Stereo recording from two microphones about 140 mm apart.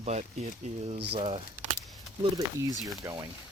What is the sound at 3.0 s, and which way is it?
Speech, 20° right (ahead or behind).